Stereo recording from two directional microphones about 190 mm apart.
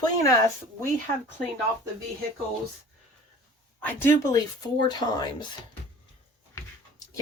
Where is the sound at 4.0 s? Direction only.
15° left (ahead or behind).